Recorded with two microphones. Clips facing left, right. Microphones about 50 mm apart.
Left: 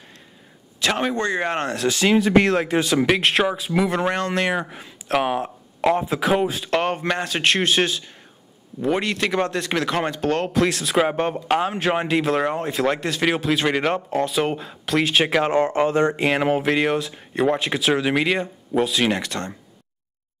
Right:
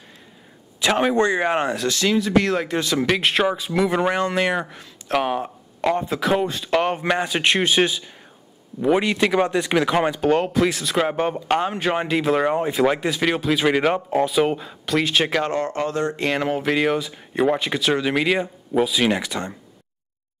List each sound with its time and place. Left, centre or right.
0.7 s speech: centre
1.9 s speech: centre
2.4 s speech: centre